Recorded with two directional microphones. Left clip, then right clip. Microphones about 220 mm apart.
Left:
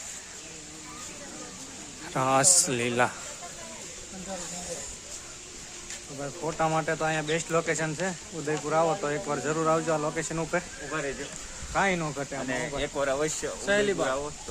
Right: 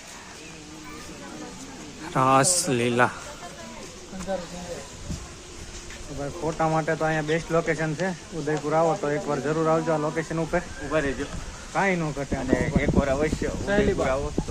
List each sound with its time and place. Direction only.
2.1 s a man's voice: centre (ahead or behind)
6.4 s speech: 10° left (ahead or behind)
10.9 s speech: 40° right (ahead or behind)
11.7 s speech: 20° left (ahead or behind)
13.7 s speech: 40° left (ahead or behind)